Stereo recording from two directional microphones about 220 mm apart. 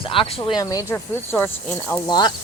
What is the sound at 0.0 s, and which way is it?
Speech, 25° left (ahead or behind).